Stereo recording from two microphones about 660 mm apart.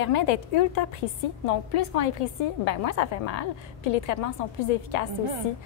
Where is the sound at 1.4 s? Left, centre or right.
Left.